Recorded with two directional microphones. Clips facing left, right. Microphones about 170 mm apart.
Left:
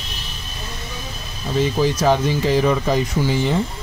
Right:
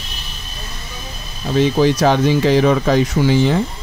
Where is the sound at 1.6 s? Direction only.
75° right (ahead or behind).